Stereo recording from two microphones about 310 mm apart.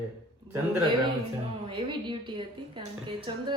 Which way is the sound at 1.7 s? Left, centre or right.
Centre.